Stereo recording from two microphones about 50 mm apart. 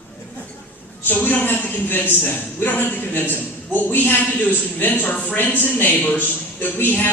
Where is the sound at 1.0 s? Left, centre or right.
Left.